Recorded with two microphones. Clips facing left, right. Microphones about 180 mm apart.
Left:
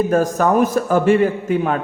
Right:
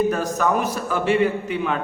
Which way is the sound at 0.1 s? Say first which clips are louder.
Left 6 dB; 45° left (ahead or behind).